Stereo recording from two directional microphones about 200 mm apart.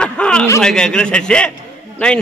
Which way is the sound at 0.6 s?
5° left (ahead or behind).